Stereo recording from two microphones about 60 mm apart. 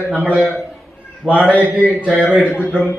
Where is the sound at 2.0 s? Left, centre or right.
Centre.